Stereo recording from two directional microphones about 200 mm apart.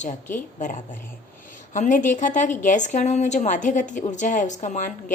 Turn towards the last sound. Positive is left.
turn(degrees=35)  # may be behind; listen again after turning